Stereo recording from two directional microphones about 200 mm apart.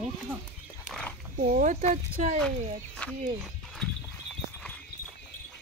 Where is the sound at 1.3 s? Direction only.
40° right (ahead or behind).